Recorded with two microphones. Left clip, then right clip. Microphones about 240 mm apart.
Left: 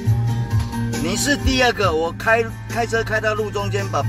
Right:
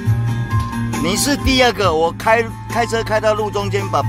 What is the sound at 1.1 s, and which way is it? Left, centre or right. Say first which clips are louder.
Speech: right 3 dB; right.